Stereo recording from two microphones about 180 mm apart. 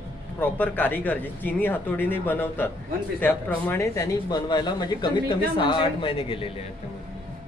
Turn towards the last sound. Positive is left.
turn(degrees=30)  # may be behind; listen again after turning